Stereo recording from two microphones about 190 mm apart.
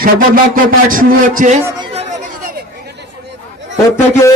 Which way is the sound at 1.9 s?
35° right (ahead or behind).